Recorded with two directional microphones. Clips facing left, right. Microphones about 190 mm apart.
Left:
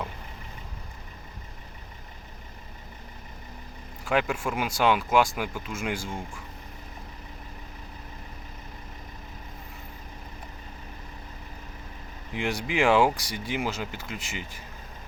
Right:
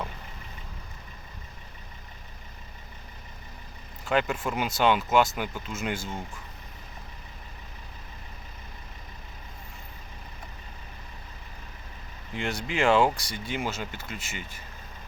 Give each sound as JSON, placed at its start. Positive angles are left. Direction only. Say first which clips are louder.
{"t": 4.0, "sound": "speech", "louder": "even", "side_deg": 10}
{"t": 12.3, "sound": "speech", "louder": "left 2 dB", "side_deg": 15}